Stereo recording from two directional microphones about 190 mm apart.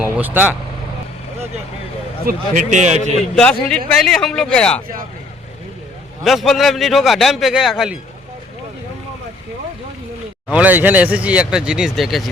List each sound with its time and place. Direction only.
0.0 s speech: 10° right (ahead or behind)
2.2 s a man's voice: 40° right (ahead or behind)
3.7 s a man's voice: 5° left (ahead or behind)
6.2 s a man's voice: centre (ahead or behind)
10.5 s speech: 10° right (ahead or behind)